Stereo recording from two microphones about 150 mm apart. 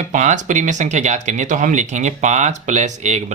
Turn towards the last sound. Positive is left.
turn(degrees=-50)  # may be behind; listen again after turning